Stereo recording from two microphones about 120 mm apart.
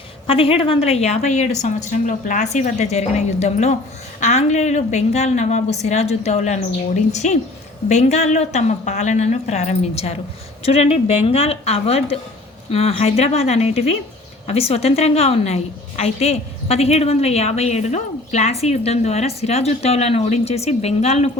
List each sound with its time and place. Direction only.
0.3 s a woman's voice: 50° left (ahead or behind)